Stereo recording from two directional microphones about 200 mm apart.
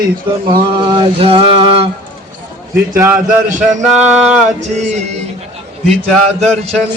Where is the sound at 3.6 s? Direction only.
5° right (ahead or behind).